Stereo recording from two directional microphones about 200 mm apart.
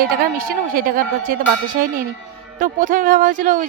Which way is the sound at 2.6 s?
45° right (ahead or behind).